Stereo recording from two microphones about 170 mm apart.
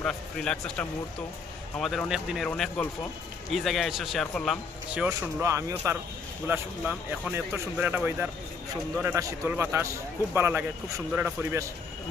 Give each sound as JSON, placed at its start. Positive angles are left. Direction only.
{"t": 0.0, "sound": "speech", "side_deg": 5}
{"t": 2.5, "sound": "speech", "side_deg": 10}
{"t": 5.4, "sound": "speech", "side_deg": -15}